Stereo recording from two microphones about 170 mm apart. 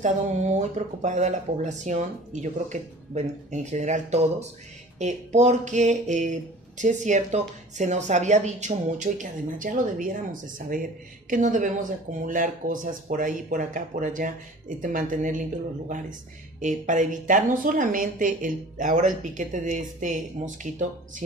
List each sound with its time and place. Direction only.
0.0 s speech: 45° right (ahead or behind)
16.5 s speech: 45° right (ahead or behind)